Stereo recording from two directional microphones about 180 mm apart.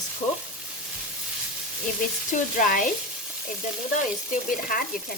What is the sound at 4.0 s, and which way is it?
Frying, 50° left (ahead or behind).